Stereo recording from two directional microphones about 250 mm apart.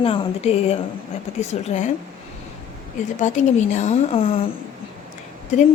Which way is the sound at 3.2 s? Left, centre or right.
Left.